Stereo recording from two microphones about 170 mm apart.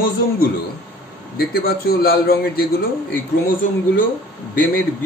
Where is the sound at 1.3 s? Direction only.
60° left (ahead or behind).